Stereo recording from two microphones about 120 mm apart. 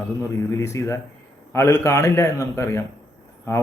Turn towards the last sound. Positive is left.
turn(degrees=25)  # may be behind; listen again after turning